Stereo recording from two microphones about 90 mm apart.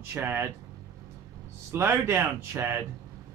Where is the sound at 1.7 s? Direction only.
25° right (ahead or behind).